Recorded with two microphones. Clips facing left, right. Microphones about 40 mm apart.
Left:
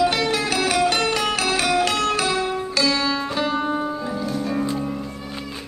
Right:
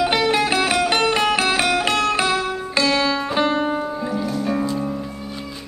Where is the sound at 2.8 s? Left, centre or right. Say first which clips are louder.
Right 3 dB; right.